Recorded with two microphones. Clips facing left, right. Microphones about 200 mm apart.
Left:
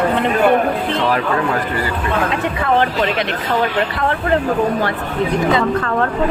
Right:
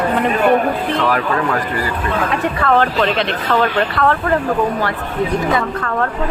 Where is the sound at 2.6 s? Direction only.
15° left (ahead or behind).